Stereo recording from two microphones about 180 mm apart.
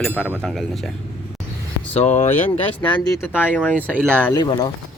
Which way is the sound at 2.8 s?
25° left (ahead or behind).